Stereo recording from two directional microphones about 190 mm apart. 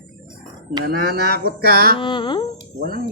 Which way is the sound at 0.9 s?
50° right (ahead or behind).